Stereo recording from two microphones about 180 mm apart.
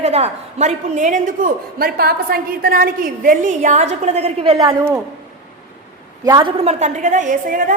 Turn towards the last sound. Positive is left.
turn(degrees=-45)  # may be behind; listen again after turning